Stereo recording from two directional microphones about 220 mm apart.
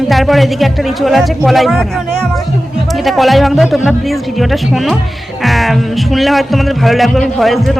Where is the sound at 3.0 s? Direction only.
Centre (ahead or behind).